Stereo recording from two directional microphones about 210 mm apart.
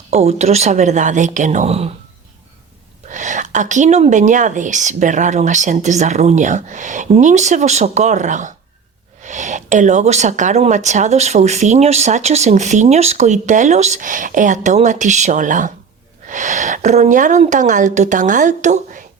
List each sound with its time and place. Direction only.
0.1 s speech: 30° right (ahead or behind)
3.1 s speech: 35° right (ahead or behind)